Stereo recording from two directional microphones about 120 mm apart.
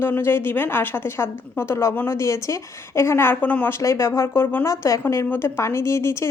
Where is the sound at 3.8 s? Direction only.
25° left (ahead or behind).